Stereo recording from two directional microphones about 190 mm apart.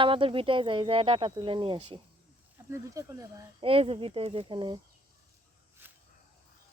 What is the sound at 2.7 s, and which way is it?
Speech, 15° right (ahead or behind).